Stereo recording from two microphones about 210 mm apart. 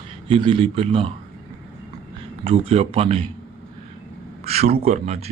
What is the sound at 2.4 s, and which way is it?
Speech, 30° right (ahead or behind).